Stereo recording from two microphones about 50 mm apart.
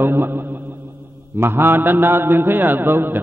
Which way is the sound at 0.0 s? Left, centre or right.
Right.